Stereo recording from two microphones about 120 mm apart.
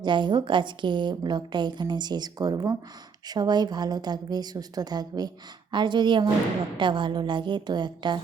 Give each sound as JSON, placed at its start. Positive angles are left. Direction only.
{"t": 0.0, "sound": "a woman's voice", "side_deg": -40}